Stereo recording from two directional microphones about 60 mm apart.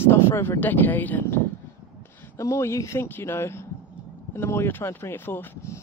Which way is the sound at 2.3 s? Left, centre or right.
Left.